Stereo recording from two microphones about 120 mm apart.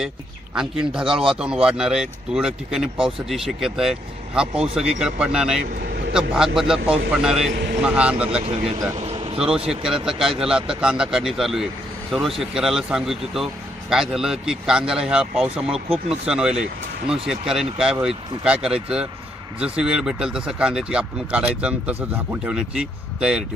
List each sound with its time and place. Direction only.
0.5 s speech: 5° right (ahead or behind)
8.3 s speech: 55° right (ahead or behind)
9.6 s speech: 5° right (ahead or behind)